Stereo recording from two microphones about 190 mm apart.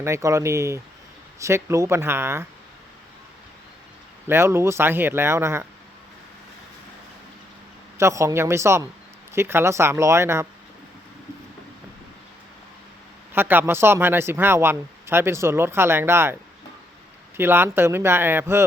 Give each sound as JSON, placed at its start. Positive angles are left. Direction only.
{"t": 0.0, "sound": "speech", "side_deg": -15}
{"t": 4.3, "sound": "speech", "side_deg": -15}
{"t": 7.9, "sound": "speech", "side_deg": -15}
{"t": 13.3, "sound": "speech", "side_deg": -10}